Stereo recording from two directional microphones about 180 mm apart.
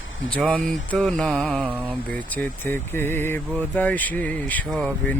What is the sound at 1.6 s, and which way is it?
Mantra, 10° right (ahead or behind).